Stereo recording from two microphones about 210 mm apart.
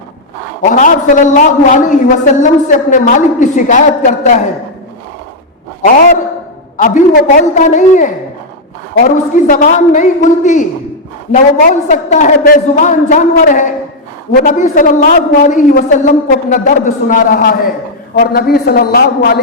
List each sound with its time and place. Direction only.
0.6 s a man's voice: 40° left (ahead or behind)
6.7 s a man's voice: 35° left (ahead or behind)